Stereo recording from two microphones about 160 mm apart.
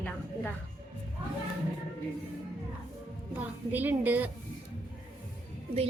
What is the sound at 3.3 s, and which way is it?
A woman's voice, 10° right (ahead or behind).